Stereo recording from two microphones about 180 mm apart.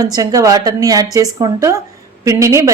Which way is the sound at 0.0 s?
20° right (ahead or behind).